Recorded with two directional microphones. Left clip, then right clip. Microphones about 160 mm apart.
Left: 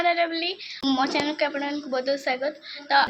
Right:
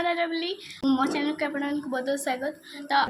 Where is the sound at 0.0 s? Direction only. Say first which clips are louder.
Left 4 dB; 15° right (ahead or behind).